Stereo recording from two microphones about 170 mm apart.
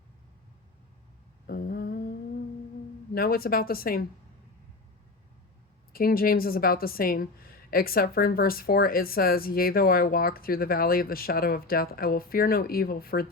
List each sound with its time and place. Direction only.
1.5 s humming: 60° left (ahead or behind)
3.2 s a woman's voice: 60° left (ahead or behind)
5.9 s a woman's voice: 60° left (ahead or behind)